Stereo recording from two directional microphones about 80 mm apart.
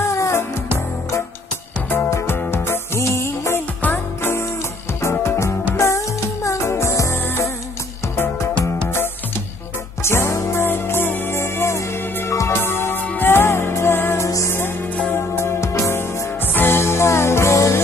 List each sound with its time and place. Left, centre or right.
0.1 s music: left
1.9 s music: left
10.0 s music: left